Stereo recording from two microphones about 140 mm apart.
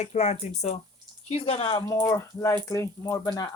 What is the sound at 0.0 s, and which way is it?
Speech, 50° left (ahead or behind).